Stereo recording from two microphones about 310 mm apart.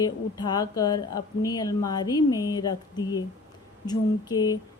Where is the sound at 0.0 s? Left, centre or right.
Centre.